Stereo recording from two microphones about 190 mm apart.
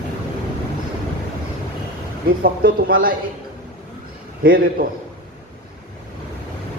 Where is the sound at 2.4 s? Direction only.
50° right (ahead or behind).